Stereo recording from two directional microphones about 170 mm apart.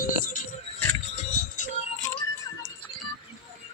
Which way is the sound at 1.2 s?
45° left (ahead or behind).